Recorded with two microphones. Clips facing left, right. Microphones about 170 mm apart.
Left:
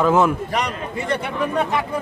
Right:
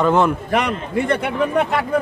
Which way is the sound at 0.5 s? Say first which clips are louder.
Right 5 dB; 55° right (ahead or behind).